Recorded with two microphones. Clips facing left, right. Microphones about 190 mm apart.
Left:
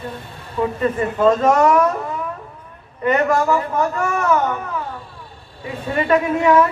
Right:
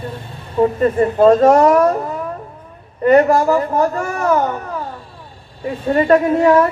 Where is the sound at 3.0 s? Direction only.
35° right (ahead or behind).